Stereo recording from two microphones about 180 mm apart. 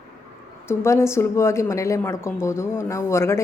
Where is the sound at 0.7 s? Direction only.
15° left (ahead or behind).